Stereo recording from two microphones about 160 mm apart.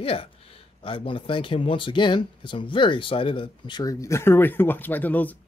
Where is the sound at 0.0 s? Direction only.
35° left (ahead or behind).